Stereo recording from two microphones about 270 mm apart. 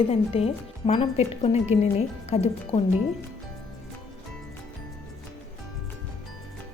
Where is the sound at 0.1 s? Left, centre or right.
Left.